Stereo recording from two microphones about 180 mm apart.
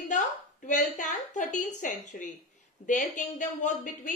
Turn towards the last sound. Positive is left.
turn(degrees=45)  # may be behind; listen again after turning